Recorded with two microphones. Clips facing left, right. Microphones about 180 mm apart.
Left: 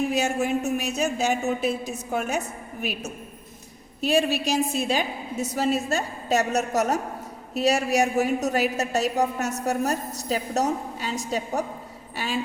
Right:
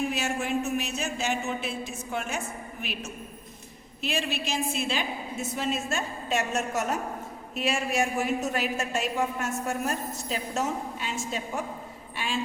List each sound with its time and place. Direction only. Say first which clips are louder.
0.1 s a woman's voice: left 5 dB; 40° left (ahead or behind)
4.3 s a woman's voice: left 6 dB; 40° left (ahead or behind)